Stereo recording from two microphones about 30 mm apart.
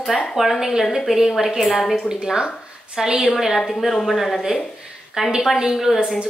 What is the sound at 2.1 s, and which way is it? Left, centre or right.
A woman's voice, right.